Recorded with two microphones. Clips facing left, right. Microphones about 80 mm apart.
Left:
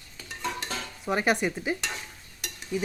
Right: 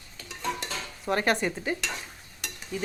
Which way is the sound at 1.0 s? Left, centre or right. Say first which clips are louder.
Even; centre.